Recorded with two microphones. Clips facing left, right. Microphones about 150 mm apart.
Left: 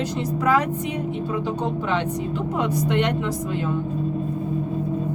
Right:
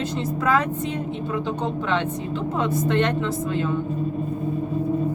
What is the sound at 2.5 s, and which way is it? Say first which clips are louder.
Speech: right 1 dB; 15° left (ahead or behind).